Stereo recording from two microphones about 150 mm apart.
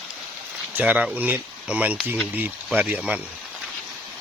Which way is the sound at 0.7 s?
10° right (ahead or behind).